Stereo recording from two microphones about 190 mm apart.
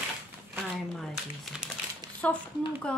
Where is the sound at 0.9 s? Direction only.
Centre (ahead or behind).